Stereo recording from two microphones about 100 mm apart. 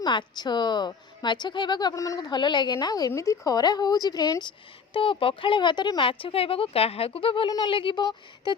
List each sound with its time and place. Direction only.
0.0 s a woman's voice: 45° left (ahead or behind)
4.9 s a woman's voice: 60° left (ahead or behind)